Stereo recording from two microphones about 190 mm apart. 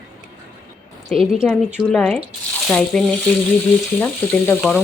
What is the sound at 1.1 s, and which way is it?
Speech, 5° left (ahead or behind).